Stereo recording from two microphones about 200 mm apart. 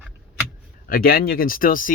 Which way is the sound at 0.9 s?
50° left (ahead or behind).